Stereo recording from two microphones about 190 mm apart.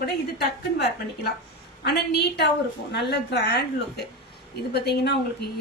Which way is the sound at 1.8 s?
60° left (ahead or behind).